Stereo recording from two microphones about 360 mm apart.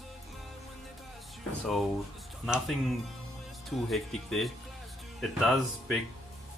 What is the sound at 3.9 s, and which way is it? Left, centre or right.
Speech, centre.